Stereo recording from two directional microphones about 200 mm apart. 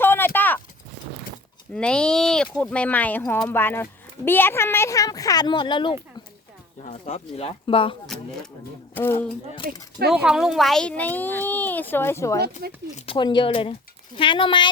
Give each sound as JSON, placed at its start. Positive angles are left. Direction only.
{"t": 0.0, "sound": "a sound", "side_deg": 10}
{"t": 0.3, "sound": "clip-clop", "side_deg": 10}
{"t": 1.7, "sound": "speech", "side_deg": 5}
{"t": 6.8, "sound": "speech", "side_deg": 35}
{"t": 8.0, "sound": "speech", "side_deg": 0}
{"t": 10.1, "sound": "speech", "side_deg": -5}
{"t": 12.6, "sound": "speech", "side_deg": -50}
{"t": 13.1, "sound": "speech", "side_deg": 25}